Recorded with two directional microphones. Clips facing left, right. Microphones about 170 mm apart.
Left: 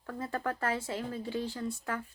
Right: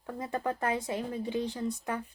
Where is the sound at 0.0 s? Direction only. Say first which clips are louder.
Right 2 dB; 20° right (ahead or behind).